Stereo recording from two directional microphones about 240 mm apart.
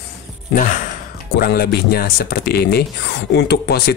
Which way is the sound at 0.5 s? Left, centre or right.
Left.